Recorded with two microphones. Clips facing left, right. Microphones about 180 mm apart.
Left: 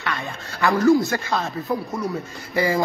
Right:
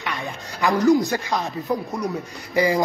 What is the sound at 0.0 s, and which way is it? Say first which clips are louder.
Speech: even; 15° right (ahead or behind).